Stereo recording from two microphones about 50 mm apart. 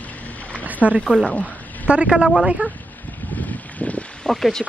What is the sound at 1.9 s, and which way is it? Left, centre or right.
Speech, right.